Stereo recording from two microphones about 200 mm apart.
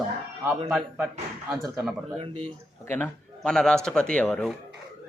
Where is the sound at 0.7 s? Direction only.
Centre (ahead or behind).